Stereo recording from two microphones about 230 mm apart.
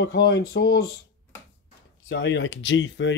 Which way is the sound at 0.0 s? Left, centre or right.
Left.